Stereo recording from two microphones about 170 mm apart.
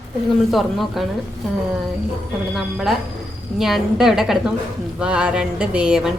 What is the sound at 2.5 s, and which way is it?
Speech, centre (ahead or behind).